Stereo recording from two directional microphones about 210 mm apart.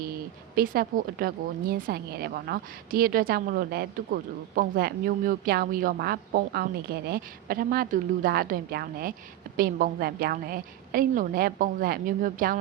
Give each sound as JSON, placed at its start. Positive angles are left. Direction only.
{"t": 0.5, "sound": "a woman's voice", "side_deg": -45}